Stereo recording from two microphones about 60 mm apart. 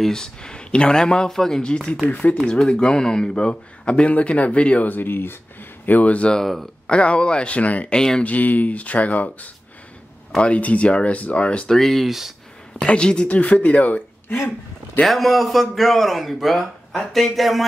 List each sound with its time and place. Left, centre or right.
0.0 s speech: centre
2.3 s speech: centre
6.3 s a man's voice: centre
6.9 s speech: centre
7.9 s speech: centre
8.2 s speech: left
11.7 s a sound: centre
12.8 s speech: centre
15.0 s a man's voice: centre